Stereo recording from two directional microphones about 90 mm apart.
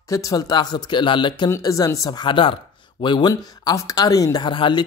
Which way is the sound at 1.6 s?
40° left (ahead or behind).